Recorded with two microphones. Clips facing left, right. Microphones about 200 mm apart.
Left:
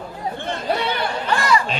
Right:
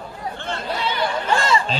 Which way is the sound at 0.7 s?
60° left (ahead or behind).